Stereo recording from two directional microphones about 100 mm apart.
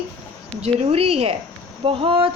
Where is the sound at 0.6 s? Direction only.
85° right.